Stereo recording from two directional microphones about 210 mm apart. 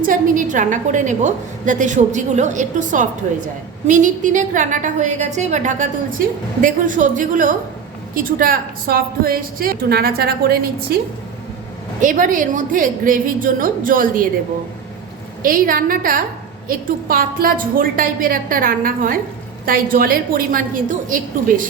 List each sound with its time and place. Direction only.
0.1 s a woman's voice: 40° right (ahead or behind)
11.9 s a woman's voice: 40° right (ahead or behind)
15.4 s a woman's voice: 40° right (ahead or behind)